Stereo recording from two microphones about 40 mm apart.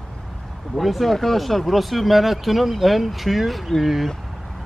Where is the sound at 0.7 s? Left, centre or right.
Centre.